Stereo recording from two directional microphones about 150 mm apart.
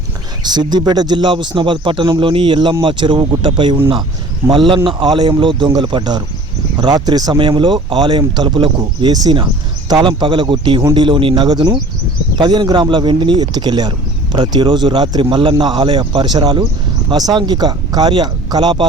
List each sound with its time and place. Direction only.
0.4 s speech: 30° right (ahead or behind)